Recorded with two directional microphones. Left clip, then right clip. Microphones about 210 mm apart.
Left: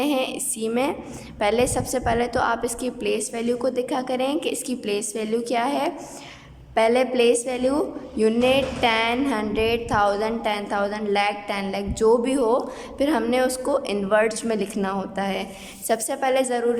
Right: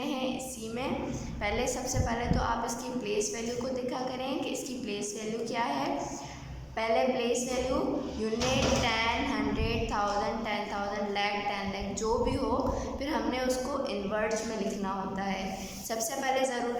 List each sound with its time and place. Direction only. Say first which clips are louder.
0.0 s music: left 10 dB; 50° left (ahead or behind)
1.4 s a woman's voice: left 11 dB; 55° left (ahead or behind)